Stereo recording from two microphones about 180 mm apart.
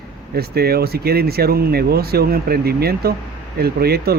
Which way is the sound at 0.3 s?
60° right (ahead or behind).